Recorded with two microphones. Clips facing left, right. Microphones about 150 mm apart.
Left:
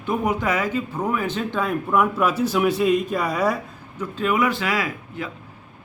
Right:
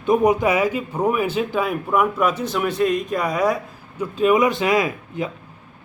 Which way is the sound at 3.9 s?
15° right (ahead or behind).